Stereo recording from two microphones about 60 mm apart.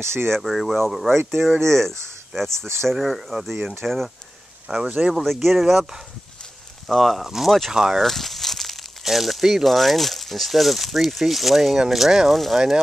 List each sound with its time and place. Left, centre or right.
0.0 s speech: right
0.3 s speech: centre
4.6 s speech: centre
5.1 s speech: centre
6.9 s speech: centre